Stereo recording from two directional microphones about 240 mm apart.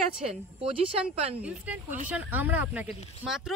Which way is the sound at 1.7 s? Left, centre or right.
Centre.